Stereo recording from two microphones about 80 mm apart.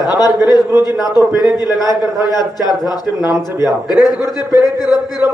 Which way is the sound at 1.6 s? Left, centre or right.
Left.